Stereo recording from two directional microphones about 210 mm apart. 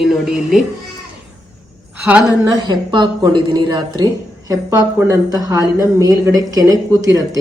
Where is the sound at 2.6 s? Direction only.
20° right (ahead or behind).